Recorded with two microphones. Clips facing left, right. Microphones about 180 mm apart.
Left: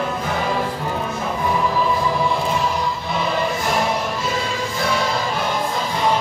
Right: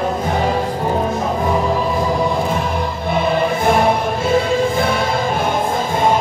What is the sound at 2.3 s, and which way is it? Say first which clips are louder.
Music: right 2 dB; 55° right (ahead or behind).